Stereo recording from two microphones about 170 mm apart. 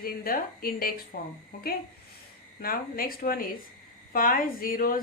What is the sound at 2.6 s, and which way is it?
Speech, 60° left (ahead or behind).